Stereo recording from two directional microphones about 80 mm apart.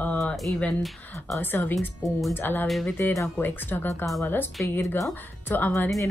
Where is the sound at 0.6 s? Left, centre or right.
Centre.